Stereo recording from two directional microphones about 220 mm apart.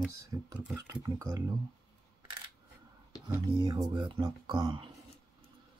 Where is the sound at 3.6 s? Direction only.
20° right (ahead or behind).